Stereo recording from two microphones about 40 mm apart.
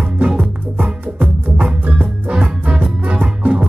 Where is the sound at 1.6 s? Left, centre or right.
Right.